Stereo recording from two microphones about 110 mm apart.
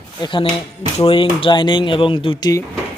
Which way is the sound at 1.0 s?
55° left (ahead or behind).